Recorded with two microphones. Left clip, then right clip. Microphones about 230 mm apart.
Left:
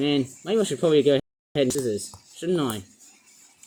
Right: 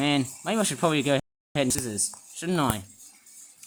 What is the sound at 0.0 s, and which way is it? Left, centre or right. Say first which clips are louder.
Speech: left 1 dB; right.